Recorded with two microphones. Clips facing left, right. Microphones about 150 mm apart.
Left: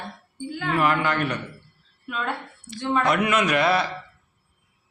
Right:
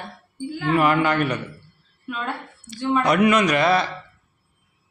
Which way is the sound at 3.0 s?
Centre (ahead or behind).